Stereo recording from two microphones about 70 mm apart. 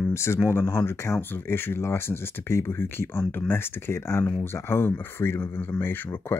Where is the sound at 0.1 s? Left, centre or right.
Left.